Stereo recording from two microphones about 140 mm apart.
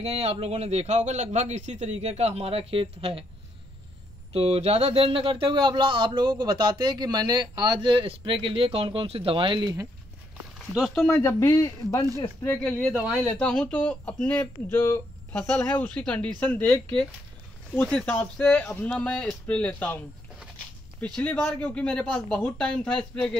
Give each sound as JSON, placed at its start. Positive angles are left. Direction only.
{"t": 0.0, "sound": "a man's voice", "side_deg": -45}
{"t": 4.3, "sound": "speech", "side_deg": -45}
{"t": 11.1, "sound": "a man's voice", "side_deg": 20}
{"t": 12.6, "sound": "speech", "side_deg": 5}
{"t": 21.2, "sound": "speech", "side_deg": 5}